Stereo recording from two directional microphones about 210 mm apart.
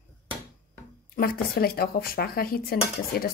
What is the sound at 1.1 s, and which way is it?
A woman's voice, 45° left (ahead or behind).